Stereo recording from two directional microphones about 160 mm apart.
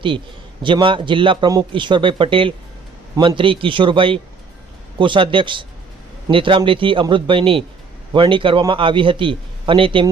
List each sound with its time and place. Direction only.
0.6 s a man's voice: 30° right (ahead or behind)